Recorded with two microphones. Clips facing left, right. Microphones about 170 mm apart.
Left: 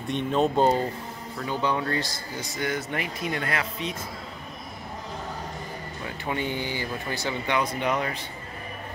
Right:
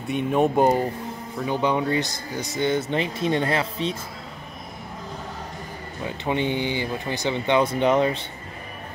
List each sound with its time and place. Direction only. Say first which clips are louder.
0.1 s speech: right 3 dB; 10° right (ahead or behind); by 3.9 s 30° right (ahead or behind)
6.0 s speech: right 5 dB; 20° right (ahead or behind)